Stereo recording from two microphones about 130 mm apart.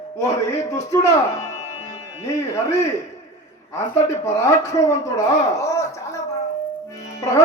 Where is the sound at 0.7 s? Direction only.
20° left (ahead or behind).